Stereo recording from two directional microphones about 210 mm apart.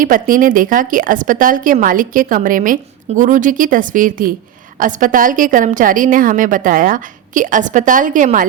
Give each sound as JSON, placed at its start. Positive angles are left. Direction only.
{"t": 0.0, "sound": "a woman's voice", "side_deg": -40}